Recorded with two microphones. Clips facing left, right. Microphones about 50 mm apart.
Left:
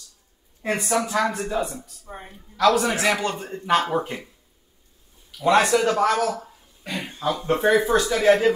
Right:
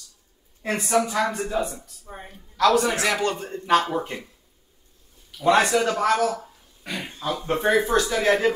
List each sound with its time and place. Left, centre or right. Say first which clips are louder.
0.6 s a man's voice: right 1 dB; centre
5.4 s a man's voice: left 1 dB; centre
6.1 s speech: right 1 dB; left
6.4 s a sound: left 1 dB; centre
7.2 s a man's voice: left 3 dB; centre